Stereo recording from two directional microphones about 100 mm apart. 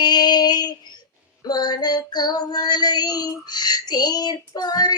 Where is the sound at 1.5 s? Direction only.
45° left (ahead or behind).